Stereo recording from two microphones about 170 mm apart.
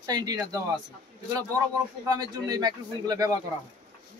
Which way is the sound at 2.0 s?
25° right (ahead or behind).